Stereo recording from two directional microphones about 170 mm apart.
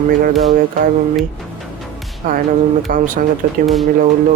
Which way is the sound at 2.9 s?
50° right (ahead or behind).